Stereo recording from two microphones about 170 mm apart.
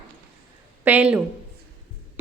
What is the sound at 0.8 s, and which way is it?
Speech, 10° right (ahead or behind).